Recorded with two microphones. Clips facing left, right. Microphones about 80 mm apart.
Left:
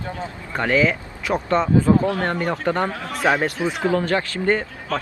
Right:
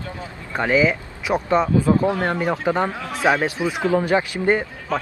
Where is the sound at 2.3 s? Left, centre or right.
Centre.